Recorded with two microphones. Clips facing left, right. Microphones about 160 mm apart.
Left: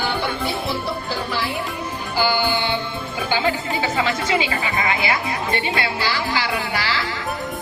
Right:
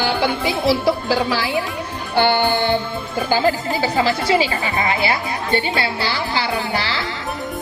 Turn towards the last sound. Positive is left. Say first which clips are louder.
# right 2 dB
turn(degrees=-30)  # may be behind; listen again after turning